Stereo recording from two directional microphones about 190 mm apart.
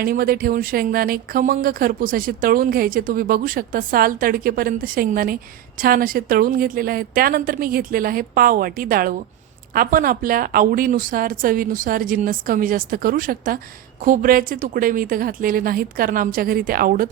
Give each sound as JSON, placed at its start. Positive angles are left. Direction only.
{"t": 0.0, "sound": "speech", "side_deg": -50}